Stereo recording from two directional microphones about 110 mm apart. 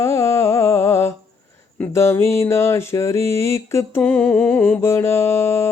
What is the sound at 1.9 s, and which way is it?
Music, 25° left (ahead or behind).